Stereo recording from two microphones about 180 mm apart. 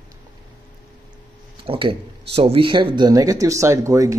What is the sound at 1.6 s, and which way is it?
Speech, 30° right (ahead or behind).